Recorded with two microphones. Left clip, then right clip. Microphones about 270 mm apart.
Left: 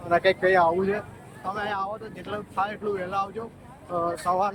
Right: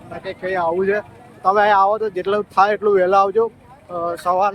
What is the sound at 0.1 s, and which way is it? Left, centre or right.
Speech, centre.